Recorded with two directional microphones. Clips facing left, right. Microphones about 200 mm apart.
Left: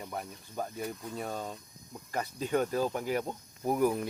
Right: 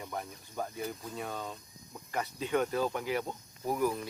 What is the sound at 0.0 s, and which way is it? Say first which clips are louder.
Speech: even; 25° left (ahead or behind).